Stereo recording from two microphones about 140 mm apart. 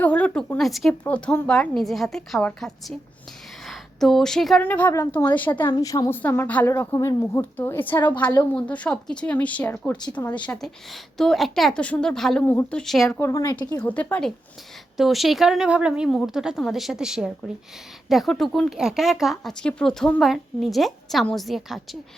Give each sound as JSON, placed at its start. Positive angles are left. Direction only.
{"t": 0.0, "sound": "a woman's voice", "side_deg": 10}
{"t": 5.7, "sound": "a woman's voice", "side_deg": 25}
{"t": 12.4, "sound": "a woman's voice", "side_deg": 15}
{"t": 12.8, "sound": "speech", "side_deg": 0}
{"t": 13.1, "sound": "a woman's voice", "side_deg": 20}
{"t": 13.8, "sound": "a woman's voice", "side_deg": 10}